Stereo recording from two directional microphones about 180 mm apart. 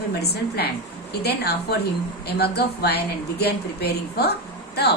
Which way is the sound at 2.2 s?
65° left (ahead or behind).